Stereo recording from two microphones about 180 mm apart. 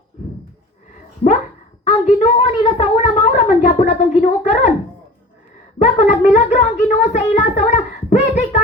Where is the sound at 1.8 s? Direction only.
40° left (ahead or behind).